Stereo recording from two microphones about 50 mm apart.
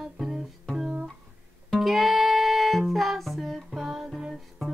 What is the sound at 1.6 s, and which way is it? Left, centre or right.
Music, centre.